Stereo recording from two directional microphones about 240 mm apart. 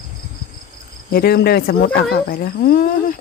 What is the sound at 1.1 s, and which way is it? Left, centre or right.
Speech, left.